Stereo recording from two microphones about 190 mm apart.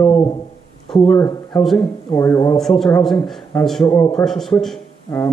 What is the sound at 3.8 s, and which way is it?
Speech, 20° left (ahead or behind).